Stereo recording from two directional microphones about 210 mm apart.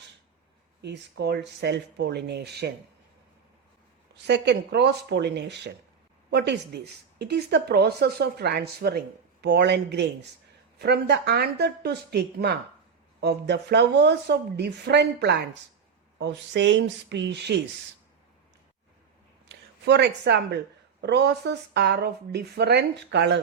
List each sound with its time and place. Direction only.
0.8 s speech: 55° right (ahead or behind)
4.1 s speech: 55° right (ahead or behind)
19.5 s a woman's voice: 55° right (ahead or behind)